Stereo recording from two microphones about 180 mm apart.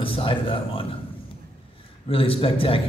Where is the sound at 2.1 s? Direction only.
30° left (ahead or behind).